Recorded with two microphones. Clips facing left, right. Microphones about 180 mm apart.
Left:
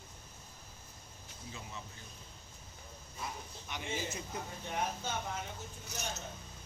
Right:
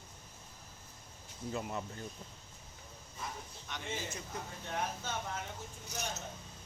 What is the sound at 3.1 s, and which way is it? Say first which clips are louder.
Speech: left 1 dB; 5° left (ahead or behind).